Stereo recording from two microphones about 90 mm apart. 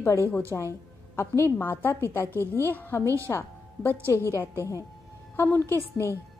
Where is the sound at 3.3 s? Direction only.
25° left (ahead or behind).